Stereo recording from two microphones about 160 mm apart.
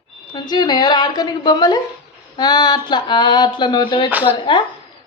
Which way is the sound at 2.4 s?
25° left (ahead or behind).